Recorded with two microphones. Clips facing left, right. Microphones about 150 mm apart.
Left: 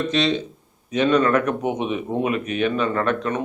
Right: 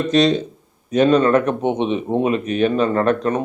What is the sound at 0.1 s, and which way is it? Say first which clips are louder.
Speech: right 6 dB; 40° right (ahead or behind).